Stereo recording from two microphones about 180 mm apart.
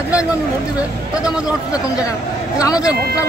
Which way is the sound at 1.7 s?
20° left (ahead or behind).